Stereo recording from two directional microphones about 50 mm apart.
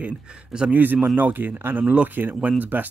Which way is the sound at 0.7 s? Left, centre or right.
Right.